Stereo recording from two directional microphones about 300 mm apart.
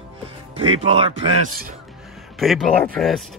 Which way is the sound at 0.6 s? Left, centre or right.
Centre.